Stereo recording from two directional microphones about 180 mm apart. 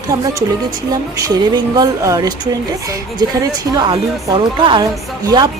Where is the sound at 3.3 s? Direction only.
25° right (ahead or behind).